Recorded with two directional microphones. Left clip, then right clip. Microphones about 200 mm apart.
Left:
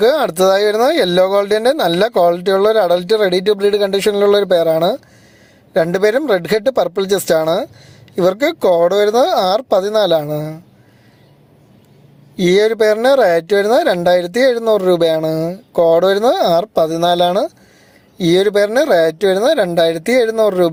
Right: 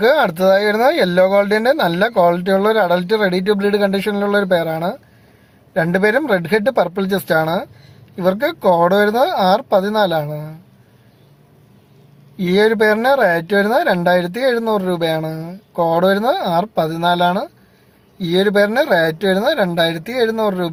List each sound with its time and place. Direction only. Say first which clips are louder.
0.0 s speech: left 1 dB; 35° left (ahead or behind)
12.4 s speech: left 2 dB; 40° left (ahead or behind)